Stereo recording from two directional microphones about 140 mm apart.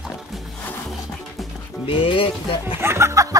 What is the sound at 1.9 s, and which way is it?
Music, 40° left (ahead or behind).